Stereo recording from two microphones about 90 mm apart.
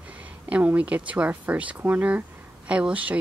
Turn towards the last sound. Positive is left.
turn(degrees=-15)  # may be behind; listen again after turning